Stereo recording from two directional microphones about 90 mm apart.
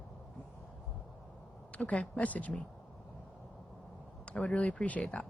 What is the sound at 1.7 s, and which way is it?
Speech, 15° left (ahead or behind).